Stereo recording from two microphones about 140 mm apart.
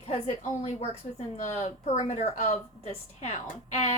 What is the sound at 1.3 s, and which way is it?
Speech, 55° left (ahead or behind).